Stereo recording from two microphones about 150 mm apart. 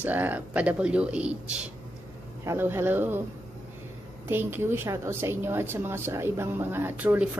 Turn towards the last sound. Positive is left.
turn(degrees=-10)  # may be behind; listen again after turning